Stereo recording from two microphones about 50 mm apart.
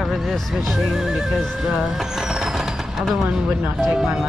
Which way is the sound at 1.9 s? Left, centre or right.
Centre.